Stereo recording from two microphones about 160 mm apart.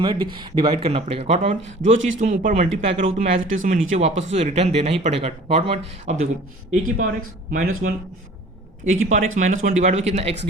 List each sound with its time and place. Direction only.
0.0 s speech: 30° right (ahead or behind)
6.8 s speech: 60° right (ahead or behind)
8.8 s speech: 45° right (ahead or behind)